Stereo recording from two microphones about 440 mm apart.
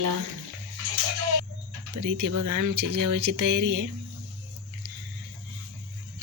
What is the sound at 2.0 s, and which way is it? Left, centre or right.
Speech, right.